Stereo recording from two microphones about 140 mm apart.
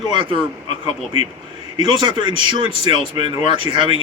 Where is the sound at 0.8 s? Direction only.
50° left (ahead or behind).